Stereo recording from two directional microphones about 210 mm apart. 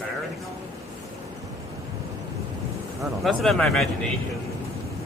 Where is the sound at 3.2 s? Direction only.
Centre (ahead or behind).